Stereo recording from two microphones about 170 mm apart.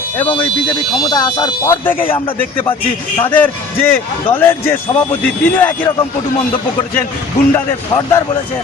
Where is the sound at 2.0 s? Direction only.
35° left (ahead or behind).